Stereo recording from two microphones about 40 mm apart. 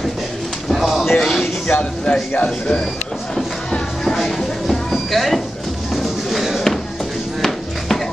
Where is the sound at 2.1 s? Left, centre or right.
Left.